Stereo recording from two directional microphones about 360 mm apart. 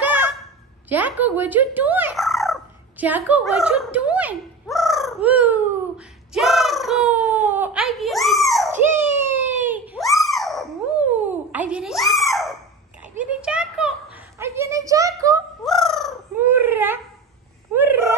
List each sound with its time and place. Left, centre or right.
0.8 s speech: centre
3.3 s fowl: centre
9.7 s a sound: centre